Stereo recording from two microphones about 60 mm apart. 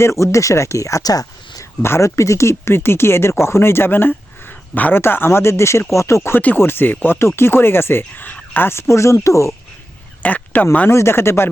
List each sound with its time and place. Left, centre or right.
0.0 s speech: left
1.8 s speech: left
4.9 s speech: left
6.3 s speech: left
8.9 s speech: left
10.2 s speech: left
10.8 s speech: left